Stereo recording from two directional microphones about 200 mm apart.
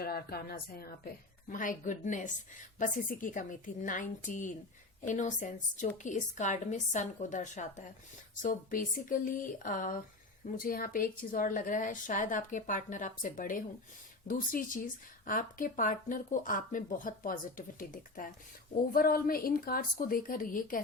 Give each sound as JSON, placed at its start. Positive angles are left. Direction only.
{"t": 0.0, "sound": "a woman's voice", "side_deg": 50}